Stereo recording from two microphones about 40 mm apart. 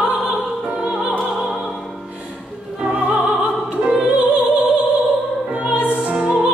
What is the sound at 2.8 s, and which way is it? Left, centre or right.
Music, right.